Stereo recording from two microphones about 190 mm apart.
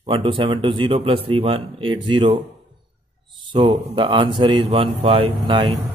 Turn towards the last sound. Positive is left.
turn(degrees=-25)  # may be behind; listen again after turning